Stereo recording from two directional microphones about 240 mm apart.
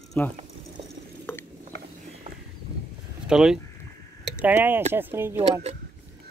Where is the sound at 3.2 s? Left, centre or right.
Centre.